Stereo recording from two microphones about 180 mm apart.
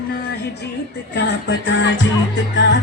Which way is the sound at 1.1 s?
85° left.